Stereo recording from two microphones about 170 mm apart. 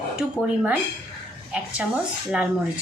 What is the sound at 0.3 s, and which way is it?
Speech, 5° right (ahead or behind).